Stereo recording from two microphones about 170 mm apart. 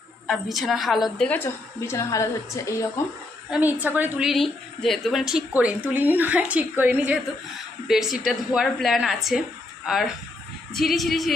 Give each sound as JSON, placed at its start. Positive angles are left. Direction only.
{"t": 0.3, "sound": "a woman's voice", "side_deg": 0}
{"t": 1.3, "sound": "a woman's voice", "side_deg": 15}
{"t": 3.5, "sound": "a woman's voice", "side_deg": -10}
{"t": 4.3, "sound": "a woman's voice", "side_deg": 0}